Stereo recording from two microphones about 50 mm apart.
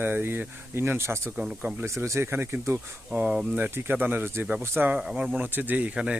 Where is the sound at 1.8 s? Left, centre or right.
Right.